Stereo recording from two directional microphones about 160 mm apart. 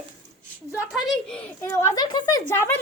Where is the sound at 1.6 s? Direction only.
20° left (ahead or behind).